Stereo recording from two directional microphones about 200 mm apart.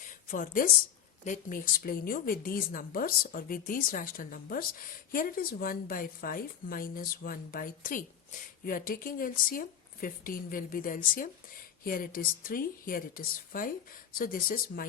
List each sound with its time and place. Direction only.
0.3 s a woman's voice: 40° left (ahead or behind)